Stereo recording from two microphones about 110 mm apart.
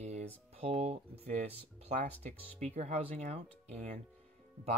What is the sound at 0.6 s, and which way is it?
Speech, 65° right (ahead or behind).